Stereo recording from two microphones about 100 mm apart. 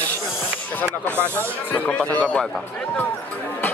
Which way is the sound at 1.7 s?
15° left (ahead or behind).